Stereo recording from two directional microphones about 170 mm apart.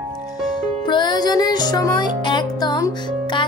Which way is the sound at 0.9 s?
25° left (ahead or behind).